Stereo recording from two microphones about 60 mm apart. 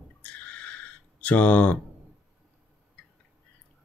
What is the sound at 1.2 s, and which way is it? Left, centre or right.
Speech, left.